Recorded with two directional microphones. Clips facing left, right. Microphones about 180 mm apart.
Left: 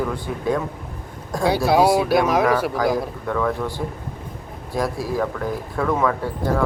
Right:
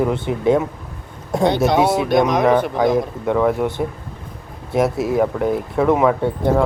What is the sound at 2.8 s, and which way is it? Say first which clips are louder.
Speech: right 4 dB; 25° right (ahead or behind).